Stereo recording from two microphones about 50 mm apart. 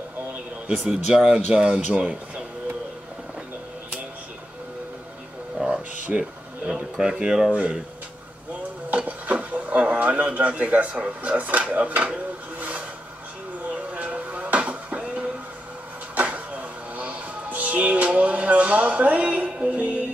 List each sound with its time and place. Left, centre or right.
0.8 s speech: centre
5.6 s a sound: right
6.1 s speech: centre
7.5 s speech: right
8.9 s speech: right
13.7 s a sound: right
16.2 s music: right